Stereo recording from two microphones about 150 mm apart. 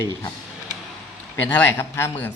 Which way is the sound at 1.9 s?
15° left (ahead or behind).